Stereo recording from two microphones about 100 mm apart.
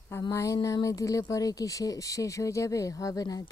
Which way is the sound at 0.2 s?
30° left (ahead or behind).